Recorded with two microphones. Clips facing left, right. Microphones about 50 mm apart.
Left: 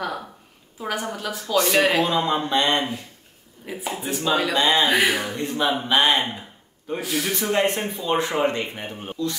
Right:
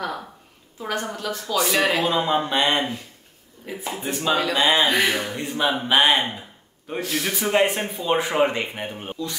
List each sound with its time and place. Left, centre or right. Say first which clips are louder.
0.7 s a woman's voice: even; centre
4.0 s a woman's voice: even; centre
4.8 s a woman's voice: left 1 dB; centre
5.3 s speech: even; centre
7.0 s a woman's voice: right 1 dB; centre